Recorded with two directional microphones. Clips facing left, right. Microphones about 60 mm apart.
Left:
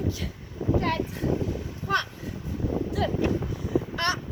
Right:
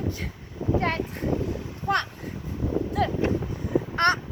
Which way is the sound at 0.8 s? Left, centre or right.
Right.